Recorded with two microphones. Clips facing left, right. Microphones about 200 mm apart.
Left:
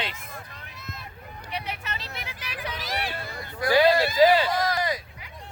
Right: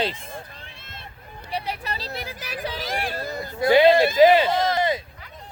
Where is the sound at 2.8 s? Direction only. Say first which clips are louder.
Right 3 dB; 50° right (ahead or behind).